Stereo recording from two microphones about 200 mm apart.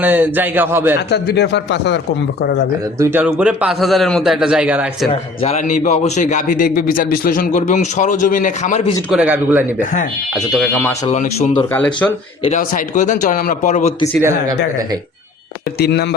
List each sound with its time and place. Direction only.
0.0 s speech: 10° right (ahead or behind)
1.1 s speech: 55° left (ahead or behind)
3.0 s a man's voice: 10° right (ahead or behind)
5.1 s a man's voice: 30° left (ahead or behind)
9.0 s a man's voice: 5° right (ahead or behind)
11.1 s a man's voice: 35° left (ahead or behind)
11.7 s speech: 5° left (ahead or behind)
12.4 s a man's voice: 35° left (ahead or behind)
15.8 s speech: 55° left (ahead or behind)